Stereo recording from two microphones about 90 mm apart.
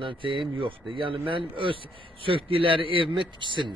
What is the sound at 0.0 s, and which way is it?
A man's voice, 70° right (ahead or behind).